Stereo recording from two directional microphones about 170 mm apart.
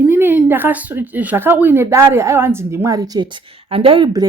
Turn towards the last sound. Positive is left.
turn(degrees=-25)  # may be behind; listen again after turning